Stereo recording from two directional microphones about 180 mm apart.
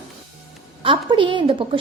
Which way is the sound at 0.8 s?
25° right (ahead or behind).